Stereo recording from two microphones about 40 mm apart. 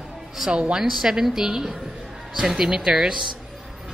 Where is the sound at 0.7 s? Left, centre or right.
Centre.